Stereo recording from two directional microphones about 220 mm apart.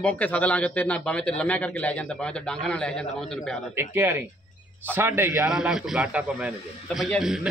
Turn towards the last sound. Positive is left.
turn(degrees=0)  # may be behind; listen again after turning